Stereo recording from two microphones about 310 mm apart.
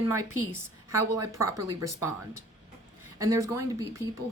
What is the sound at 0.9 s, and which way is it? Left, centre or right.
Speech, right.